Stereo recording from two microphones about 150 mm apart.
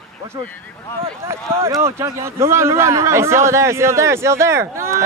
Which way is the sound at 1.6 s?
20° right (ahead or behind).